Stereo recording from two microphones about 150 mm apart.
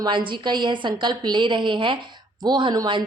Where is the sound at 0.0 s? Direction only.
30° right (ahead or behind).